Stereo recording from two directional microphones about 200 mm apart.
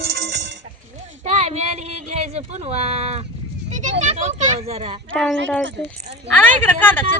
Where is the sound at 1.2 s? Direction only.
35° right (ahead or behind).